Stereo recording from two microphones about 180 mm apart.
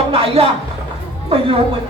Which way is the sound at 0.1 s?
30° right (ahead or behind).